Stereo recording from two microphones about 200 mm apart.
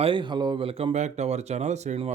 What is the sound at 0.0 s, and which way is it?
Speech, 25° right (ahead or behind).